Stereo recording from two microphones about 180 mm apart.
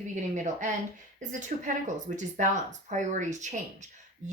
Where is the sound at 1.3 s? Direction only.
45° right (ahead or behind).